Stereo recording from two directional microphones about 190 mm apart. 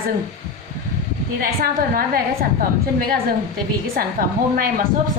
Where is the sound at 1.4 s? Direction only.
50° right (ahead or behind).